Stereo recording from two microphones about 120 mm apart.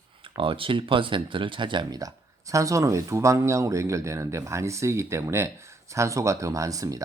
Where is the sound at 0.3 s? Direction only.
45° right (ahead or behind).